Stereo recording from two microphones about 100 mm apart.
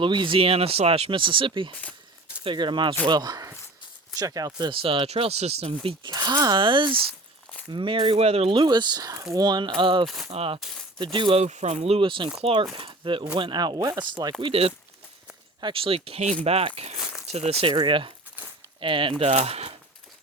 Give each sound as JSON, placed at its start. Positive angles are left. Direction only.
{"t": 0.0, "sound": "speech", "side_deg": -55}
{"t": 3.1, "sound": "speech", "side_deg": -40}
{"t": 4.7, "sound": "speech", "side_deg": -60}
{"t": 6.1, "sound": "speech", "side_deg": -45}
{"t": 8.2, "sound": "speech", "side_deg": -80}
{"t": 10.2, "sound": "speech", "side_deg": -70}
{"t": 11.0, "sound": "speech", "side_deg": -60}
{"t": 12.4, "sound": "speech", "side_deg": -75}
{"t": 12.7, "sound": "speech", "side_deg": -55}
{"t": 14.0, "sound": "speech", "side_deg": -45}
{"t": 14.4, "sound": "speech", "side_deg": -75}
{"t": 17.7, "sound": "speech", "side_deg": -55}
{"t": 19.2, "sound": "speech", "side_deg": -90}